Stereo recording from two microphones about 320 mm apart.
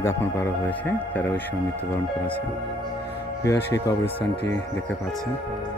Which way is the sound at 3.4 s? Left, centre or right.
Centre.